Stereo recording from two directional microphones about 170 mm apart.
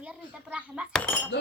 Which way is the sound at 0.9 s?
10° left (ahead or behind).